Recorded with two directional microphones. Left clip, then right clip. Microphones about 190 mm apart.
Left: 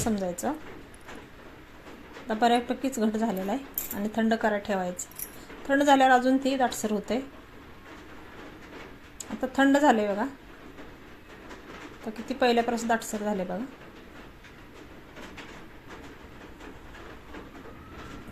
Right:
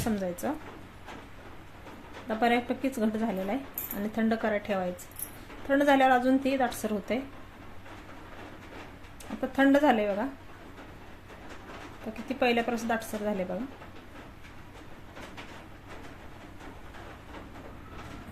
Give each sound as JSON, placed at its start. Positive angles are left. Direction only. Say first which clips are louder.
{"t": 0.0, "sound": "a woman's voice", "louder": "left 2 dB", "side_deg": 0}
{"t": 2.2, "sound": "a woman's voice", "louder": "left 3 dB", "side_deg": 5}
{"t": 9.4, "sound": "a woman's voice", "louder": "left 1 dB", "side_deg": 5}
{"t": 12.1, "sound": "a woman's voice", "louder": "left 3 dB", "side_deg": 10}